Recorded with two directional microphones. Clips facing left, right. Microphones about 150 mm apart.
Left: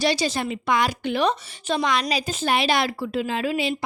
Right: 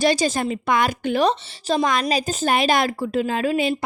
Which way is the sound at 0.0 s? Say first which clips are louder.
Right 3 dB; 45° right (ahead or behind).